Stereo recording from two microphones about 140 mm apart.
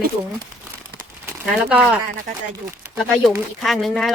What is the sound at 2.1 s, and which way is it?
Speech, 70° right (ahead or behind).